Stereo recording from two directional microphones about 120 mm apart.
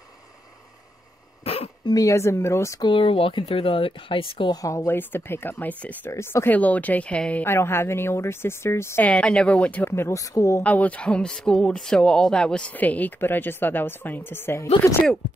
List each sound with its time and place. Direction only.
1.4 s a sound: 55° left (ahead or behind)
1.9 s speech: 30° left (ahead or behind)
2.8 s speech: 45° left (ahead or behind)
4.6 s speech: 25° left (ahead or behind)
9.1 s speech: 10° left (ahead or behind); by 10.6 s 25° left (ahead or behind)
10.6 s speech: 10° left (ahead or behind)